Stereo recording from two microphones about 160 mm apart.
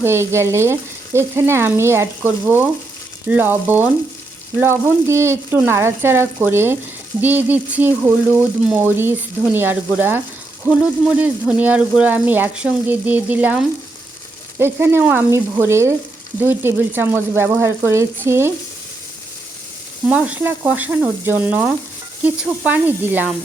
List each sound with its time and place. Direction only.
0.0 s speech: 15° right (ahead or behind)
20.1 s speech: 10° right (ahead or behind)